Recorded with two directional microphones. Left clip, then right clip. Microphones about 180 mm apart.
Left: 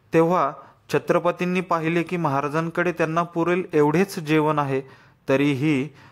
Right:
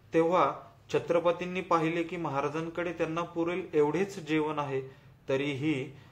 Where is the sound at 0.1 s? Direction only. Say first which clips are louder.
Left 6 dB; 60° left (ahead or behind).